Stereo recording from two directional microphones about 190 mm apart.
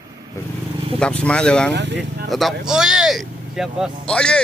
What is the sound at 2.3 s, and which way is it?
Speech, centre (ahead or behind).